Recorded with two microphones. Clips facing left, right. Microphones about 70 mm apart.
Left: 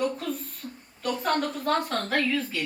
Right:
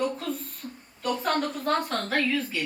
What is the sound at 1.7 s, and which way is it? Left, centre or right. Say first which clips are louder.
Speech: left 1 dB; centre.